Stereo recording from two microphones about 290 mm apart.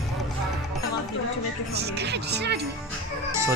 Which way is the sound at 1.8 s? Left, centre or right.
Right.